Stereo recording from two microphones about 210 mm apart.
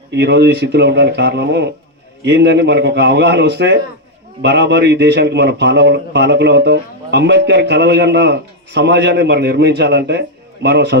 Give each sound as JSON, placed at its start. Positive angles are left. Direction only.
{"t": 0.1, "sound": "a man's voice", "side_deg": -55}